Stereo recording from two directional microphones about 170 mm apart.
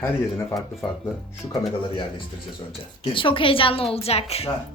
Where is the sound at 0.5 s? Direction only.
Centre (ahead or behind).